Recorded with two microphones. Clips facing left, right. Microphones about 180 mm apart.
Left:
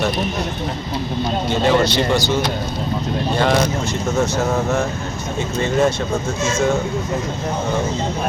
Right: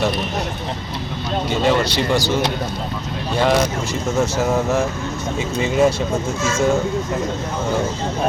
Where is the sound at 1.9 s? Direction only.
35° right (ahead or behind).